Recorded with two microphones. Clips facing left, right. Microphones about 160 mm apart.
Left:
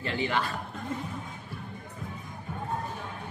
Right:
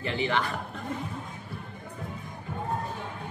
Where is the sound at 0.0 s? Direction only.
20° right (ahead or behind).